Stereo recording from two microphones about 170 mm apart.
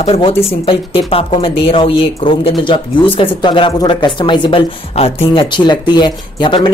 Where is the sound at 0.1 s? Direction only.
30° left (ahead or behind).